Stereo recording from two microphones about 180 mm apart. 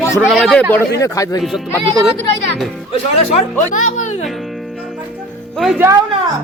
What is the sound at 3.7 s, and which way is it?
Speech, 45° left (ahead or behind).